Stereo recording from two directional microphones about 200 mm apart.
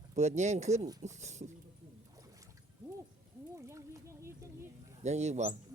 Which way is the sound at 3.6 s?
15° right (ahead or behind).